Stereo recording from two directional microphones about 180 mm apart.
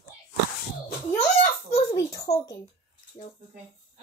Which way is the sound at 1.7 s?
15° left (ahead or behind).